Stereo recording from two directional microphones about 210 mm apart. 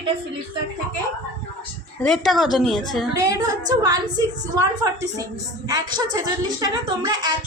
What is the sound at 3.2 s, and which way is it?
A woman's voice, 15° right (ahead or behind).